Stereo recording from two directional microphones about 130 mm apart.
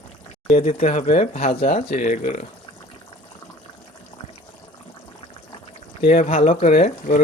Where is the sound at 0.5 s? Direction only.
55° left (ahead or behind).